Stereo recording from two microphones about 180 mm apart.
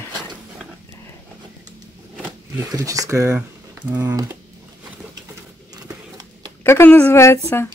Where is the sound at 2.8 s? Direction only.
20° right (ahead or behind).